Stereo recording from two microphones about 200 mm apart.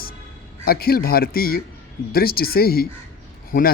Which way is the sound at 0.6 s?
50° left (ahead or behind).